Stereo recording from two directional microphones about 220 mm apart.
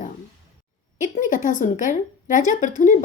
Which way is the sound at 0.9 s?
35° left (ahead or behind).